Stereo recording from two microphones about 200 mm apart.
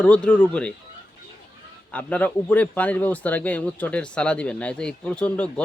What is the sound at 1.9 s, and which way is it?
Speech, 5° left (ahead or behind).